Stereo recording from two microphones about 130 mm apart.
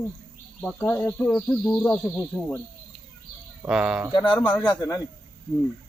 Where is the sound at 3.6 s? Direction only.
5° right (ahead or behind).